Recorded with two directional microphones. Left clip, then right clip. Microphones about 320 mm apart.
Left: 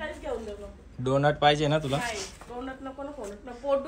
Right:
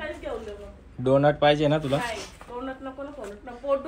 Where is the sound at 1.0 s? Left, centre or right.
Centre.